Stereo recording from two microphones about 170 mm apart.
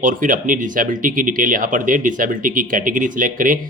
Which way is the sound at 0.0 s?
50° right (ahead or behind).